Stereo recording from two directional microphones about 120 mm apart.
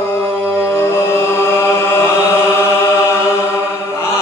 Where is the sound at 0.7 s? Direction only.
20° left (ahead or behind).